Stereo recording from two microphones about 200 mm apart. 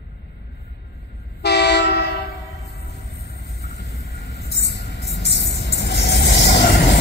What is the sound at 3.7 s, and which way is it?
Vehicle, 60° left (ahead or behind).